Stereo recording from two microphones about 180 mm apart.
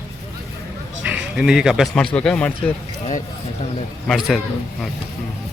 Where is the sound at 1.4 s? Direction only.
5° right (ahead or behind).